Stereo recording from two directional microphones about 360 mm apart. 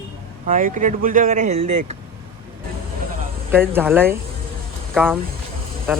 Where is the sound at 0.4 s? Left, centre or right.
Right.